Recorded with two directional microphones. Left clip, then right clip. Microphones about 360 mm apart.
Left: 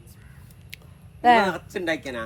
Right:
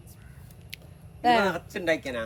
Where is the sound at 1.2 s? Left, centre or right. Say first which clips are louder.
Left 5 dB; centre.